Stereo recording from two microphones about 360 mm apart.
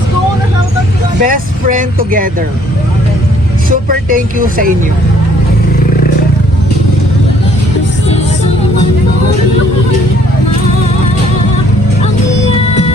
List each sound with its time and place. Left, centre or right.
1.2 s speech: right
3.7 s speech: right